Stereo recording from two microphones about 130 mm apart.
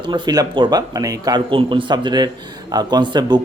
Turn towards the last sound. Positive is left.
turn(degrees=-35)  # may be behind; listen again after turning